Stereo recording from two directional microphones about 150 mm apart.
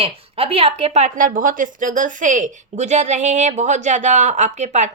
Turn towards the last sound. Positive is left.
turn(degrees=-50)  # may be behind; listen again after turning